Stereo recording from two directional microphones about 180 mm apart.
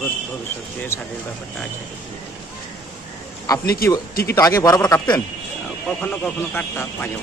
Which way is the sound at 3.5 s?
20° left (ahead or behind).